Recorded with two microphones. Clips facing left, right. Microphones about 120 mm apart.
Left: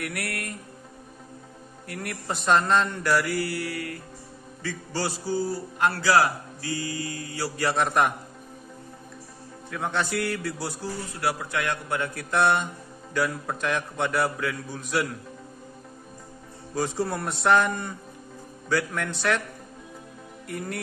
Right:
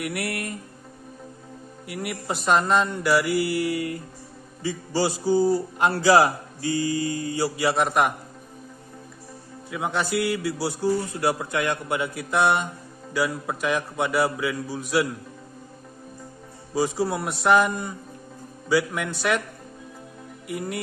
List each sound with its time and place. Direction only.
0.0 s a man's voice: 20° right (ahead or behind)
1.9 s a man's voice: 10° right (ahead or behind)
9.7 s a man's voice: 5° right (ahead or behind)
16.7 s a man's voice: 5° right (ahead or behind)
20.4 s a man's voice: 5° right (ahead or behind)